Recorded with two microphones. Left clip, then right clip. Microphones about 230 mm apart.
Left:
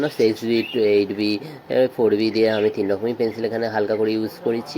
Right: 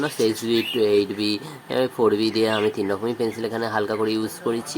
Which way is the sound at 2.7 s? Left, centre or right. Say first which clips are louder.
Left 3 dB; centre.